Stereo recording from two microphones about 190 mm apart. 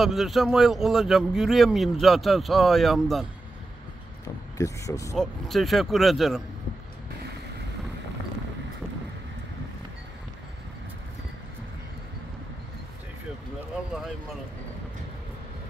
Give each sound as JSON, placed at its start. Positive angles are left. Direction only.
{"t": 0.0, "sound": "speech", "side_deg": 0}
{"t": 4.2, "sound": "speech", "side_deg": 15}
{"t": 5.1, "sound": "speech", "side_deg": 0}